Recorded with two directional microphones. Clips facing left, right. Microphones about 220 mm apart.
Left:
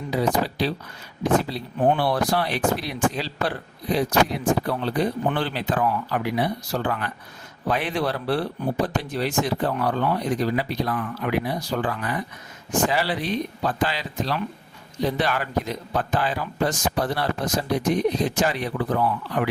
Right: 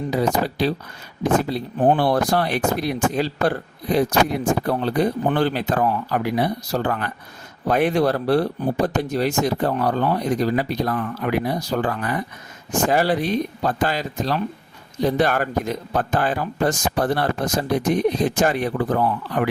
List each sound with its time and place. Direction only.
0.1 s speech: 45° right (ahead or behind)
2.0 s speech: 45° right (ahead or behind)